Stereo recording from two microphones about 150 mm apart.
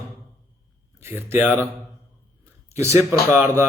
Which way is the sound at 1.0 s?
15° right (ahead or behind).